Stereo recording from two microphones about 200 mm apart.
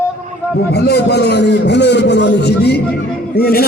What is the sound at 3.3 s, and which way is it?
Music, 50° left (ahead or behind).